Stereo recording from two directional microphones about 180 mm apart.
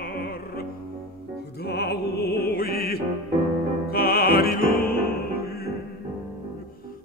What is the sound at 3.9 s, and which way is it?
Opera, 55° left (ahead or behind).